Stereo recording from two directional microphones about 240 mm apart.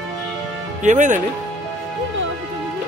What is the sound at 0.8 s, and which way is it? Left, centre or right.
Speech, right.